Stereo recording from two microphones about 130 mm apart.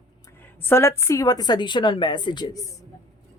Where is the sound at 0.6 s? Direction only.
20° left (ahead or behind).